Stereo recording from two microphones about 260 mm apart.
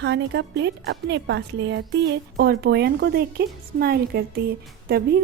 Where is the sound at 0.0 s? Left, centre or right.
Right.